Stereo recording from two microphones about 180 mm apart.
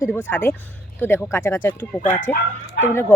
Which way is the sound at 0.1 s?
10° left (ahead or behind).